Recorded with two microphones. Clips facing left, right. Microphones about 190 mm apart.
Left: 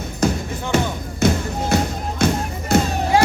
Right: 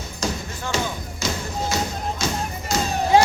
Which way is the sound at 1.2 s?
60° left (ahead or behind).